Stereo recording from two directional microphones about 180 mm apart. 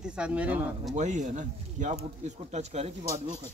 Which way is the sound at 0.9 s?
40° right (ahead or behind).